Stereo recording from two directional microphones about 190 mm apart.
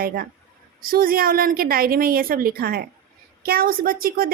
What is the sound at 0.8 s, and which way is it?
A woman's voice, 50° right (ahead or behind).